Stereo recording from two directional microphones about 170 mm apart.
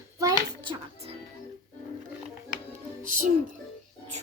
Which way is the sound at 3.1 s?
50° right (ahead or behind).